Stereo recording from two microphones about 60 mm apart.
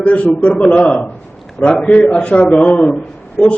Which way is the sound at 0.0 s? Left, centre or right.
Left.